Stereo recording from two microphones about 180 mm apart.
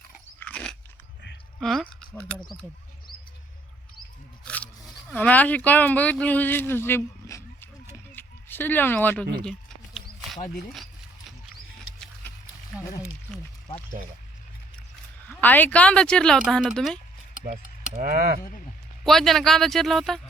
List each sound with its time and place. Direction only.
0.3 s crunch: 5° left (ahead or behind)
1.5 s speech: centre (ahead or behind)
4.4 s speech: 5° left (ahead or behind)
8.1 s a sound: 10° left (ahead or behind)
15.3 s speech: 10° left (ahead or behind)
17.4 s a sound: 45° right (ahead or behind)
19.0 s speech: centre (ahead or behind)